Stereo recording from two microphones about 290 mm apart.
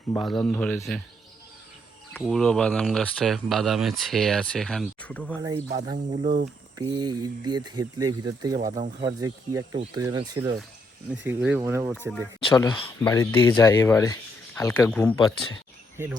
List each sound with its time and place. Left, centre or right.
0.1 s speech: centre
2.1 s speech: centre
5.7 s speech: centre
6.1 s speech: right
6.7 s speech: centre
12.5 s speech: centre